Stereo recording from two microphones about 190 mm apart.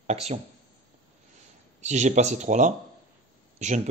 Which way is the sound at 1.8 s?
40° right (ahead or behind).